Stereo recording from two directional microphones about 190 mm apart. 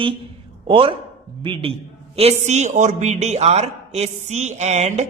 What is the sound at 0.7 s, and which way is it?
A woman's voice, 30° right (ahead or behind).